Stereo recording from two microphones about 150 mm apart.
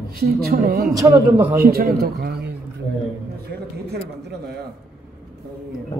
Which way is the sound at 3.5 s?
90° right.